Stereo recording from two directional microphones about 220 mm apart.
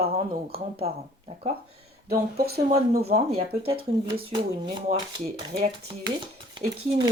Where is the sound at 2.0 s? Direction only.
45° right (ahead or behind).